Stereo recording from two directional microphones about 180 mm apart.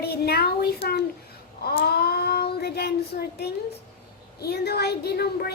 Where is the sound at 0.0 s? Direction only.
60° left (ahead or behind).